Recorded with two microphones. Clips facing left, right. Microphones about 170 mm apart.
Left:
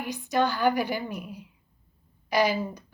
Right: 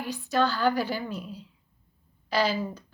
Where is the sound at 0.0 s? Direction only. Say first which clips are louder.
Even; 15° left (ahead or behind).